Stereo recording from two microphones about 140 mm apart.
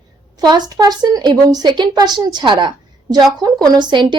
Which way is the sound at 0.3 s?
30° right (ahead or behind).